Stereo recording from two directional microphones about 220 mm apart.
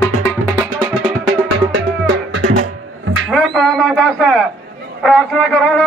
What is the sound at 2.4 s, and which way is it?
Music, 35° right (ahead or behind).